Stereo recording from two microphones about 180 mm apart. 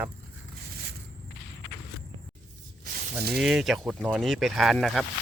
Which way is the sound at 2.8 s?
60° right (ahead or behind).